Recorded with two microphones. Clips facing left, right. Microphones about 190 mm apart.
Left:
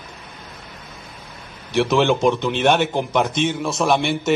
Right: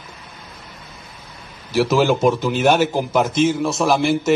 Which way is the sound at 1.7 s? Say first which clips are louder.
Right 1 dB; 5° right (ahead or behind).